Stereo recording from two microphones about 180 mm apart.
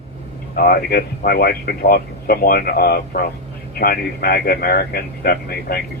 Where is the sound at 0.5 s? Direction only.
60° left (ahead or behind).